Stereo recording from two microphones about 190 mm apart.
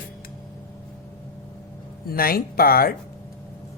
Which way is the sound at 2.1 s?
50° left (ahead or behind).